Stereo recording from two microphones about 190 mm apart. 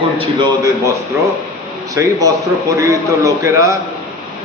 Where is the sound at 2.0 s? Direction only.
15° right (ahead or behind).